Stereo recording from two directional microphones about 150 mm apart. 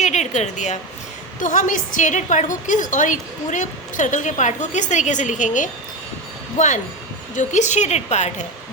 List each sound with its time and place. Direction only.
0.0 s a sound: 50° left (ahead or behind)
1.4 s a woman's voice: 60° left (ahead or behind)
7.3 s a woman's voice: 55° left (ahead or behind)